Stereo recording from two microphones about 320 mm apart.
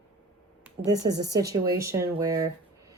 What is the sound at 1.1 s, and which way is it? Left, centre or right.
Speech, right.